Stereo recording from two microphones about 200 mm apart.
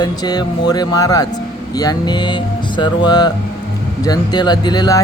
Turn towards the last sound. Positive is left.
turn(degrees=20)  # may be behind; listen again after turning